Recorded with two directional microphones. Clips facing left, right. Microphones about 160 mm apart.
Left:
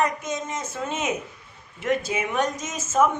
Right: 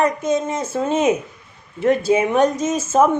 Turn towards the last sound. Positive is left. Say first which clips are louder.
# right 6 dB
turn(degrees=-35)  # may be behind; listen again after turning